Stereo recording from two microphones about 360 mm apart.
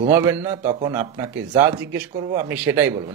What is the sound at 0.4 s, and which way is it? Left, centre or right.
A man's voice, centre.